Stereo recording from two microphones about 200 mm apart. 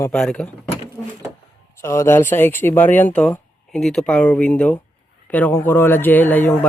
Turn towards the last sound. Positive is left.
turn(degrees=10)  # may be behind; listen again after turning